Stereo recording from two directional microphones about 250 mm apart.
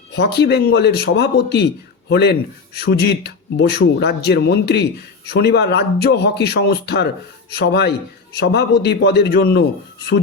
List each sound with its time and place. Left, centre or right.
0.2 s speech: left